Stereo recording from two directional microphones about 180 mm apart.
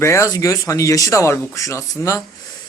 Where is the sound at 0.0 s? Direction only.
15° left (ahead or behind).